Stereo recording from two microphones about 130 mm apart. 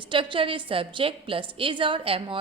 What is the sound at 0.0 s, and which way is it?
A woman's voice, 40° right (ahead or behind).